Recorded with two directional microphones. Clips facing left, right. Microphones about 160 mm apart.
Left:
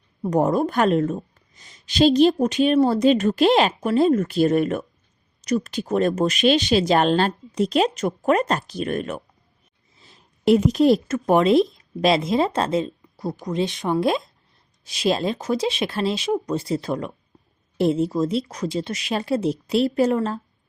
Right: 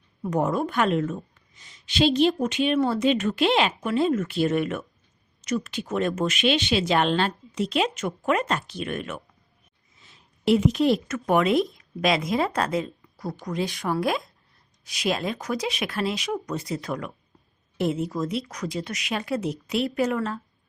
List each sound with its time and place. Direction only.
0.2 s a woman's voice: 35° left (ahead or behind)